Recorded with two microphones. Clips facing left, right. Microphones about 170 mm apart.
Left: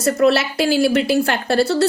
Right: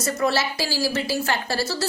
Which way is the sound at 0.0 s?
65° left (ahead or behind).